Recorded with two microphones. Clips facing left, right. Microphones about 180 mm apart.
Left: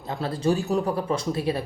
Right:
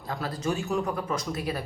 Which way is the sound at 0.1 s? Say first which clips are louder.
Left 6 dB; 30° left (ahead or behind).